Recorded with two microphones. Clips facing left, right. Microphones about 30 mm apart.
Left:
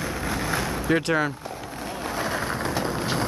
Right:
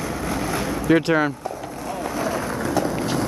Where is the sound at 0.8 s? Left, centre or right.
Centre.